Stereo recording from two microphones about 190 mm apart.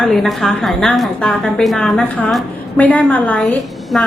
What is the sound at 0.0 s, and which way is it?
A woman's voice, centre (ahead or behind).